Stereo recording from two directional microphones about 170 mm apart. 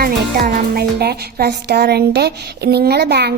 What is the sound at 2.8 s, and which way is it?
Speech, 70° right (ahead or behind).